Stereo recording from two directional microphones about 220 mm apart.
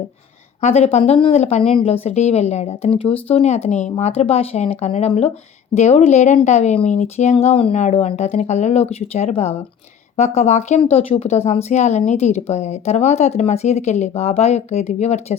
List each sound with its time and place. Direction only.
0.6 s speech: 30° left (ahead or behind)